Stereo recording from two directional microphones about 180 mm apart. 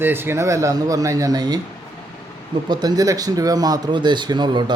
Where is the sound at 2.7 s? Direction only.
20° right (ahead or behind).